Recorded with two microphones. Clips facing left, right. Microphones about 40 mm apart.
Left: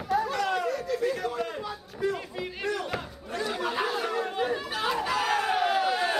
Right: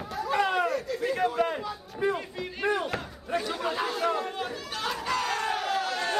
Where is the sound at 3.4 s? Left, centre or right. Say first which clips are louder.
Left 4 dB; centre.